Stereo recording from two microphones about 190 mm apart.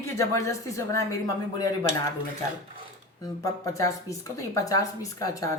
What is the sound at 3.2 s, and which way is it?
A woman's voice, 15° left (ahead or behind).